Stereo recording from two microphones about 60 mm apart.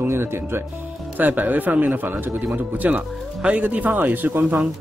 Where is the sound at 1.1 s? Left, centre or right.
Right.